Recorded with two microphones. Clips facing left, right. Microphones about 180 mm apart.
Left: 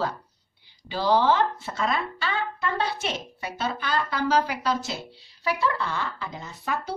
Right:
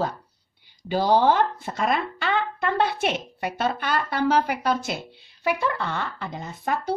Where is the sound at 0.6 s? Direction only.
50° right (ahead or behind).